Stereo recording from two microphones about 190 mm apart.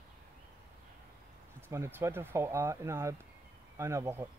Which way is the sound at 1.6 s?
15° right (ahead or behind).